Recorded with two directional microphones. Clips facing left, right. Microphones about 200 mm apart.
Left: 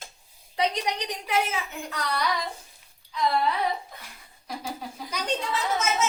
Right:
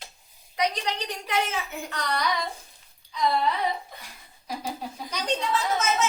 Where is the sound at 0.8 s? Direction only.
15° left (ahead or behind).